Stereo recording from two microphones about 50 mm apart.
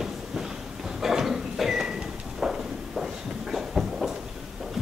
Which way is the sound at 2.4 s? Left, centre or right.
Centre.